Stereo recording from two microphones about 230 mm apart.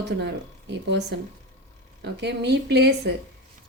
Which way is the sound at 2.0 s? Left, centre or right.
Right.